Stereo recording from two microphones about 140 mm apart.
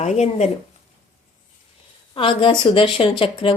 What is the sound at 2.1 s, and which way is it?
A woman's voice, 35° left (ahead or behind).